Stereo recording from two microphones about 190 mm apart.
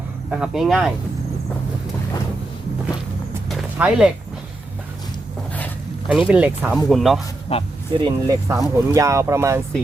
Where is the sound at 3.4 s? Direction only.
5° right (ahead or behind).